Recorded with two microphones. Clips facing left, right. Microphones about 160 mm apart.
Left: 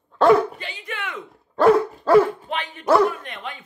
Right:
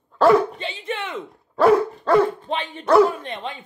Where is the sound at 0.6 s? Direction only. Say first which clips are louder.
Right 5 dB; 25° right (ahead or behind).